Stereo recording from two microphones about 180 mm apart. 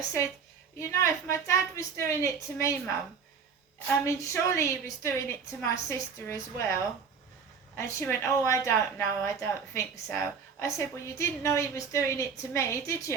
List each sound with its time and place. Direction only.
0.8 s a woman's voice: 15° left (ahead or behind)
4.0 s a woman's voice: 15° left (ahead or behind)
7.8 s a woman's voice: 15° left (ahead or behind)